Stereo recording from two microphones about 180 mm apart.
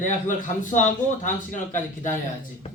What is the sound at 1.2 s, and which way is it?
Speech, 45° left (ahead or behind).